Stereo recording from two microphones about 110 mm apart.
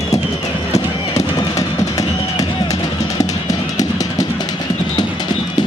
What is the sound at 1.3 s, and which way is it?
Music, 30° left (ahead or behind).